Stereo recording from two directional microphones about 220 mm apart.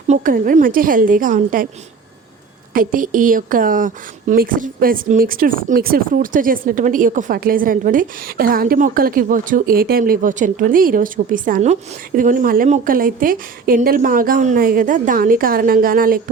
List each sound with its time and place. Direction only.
0.1 s a woman's voice: 35° right (ahead or behind)
2.7 s a woman's voice: 40° right (ahead or behind)